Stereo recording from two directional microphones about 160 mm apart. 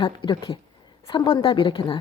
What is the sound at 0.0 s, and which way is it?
A woman's voice, 30° left (ahead or behind).